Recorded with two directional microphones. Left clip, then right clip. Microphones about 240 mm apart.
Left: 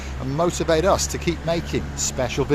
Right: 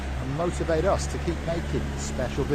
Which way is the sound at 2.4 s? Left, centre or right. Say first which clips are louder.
Left 6 dB; left.